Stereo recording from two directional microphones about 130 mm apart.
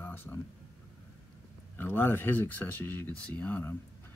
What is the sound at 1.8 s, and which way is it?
Speech, 15° left (ahead or behind).